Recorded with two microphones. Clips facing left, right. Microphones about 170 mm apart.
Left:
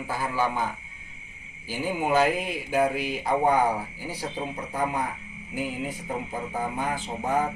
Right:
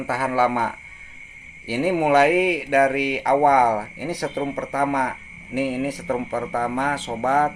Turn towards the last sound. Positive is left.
turn(degrees=-85)